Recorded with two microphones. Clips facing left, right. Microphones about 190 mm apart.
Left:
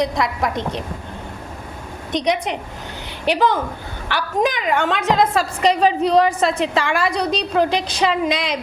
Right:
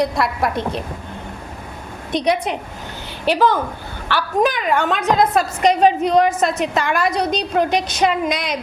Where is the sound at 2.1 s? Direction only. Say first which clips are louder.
Right 1 dB; 15° left (ahead or behind).